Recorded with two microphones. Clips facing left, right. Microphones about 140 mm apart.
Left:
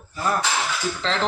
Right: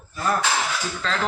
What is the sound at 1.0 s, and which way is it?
Speech, 25° left (ahead or behind).